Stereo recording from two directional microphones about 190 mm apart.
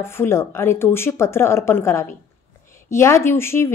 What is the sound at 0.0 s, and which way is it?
Speech, 15° left (ahead or behind).